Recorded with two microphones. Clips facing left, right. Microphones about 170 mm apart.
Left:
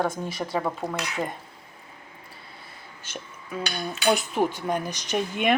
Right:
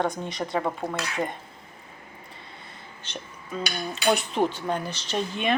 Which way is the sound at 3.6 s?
Centre (ahead or behind).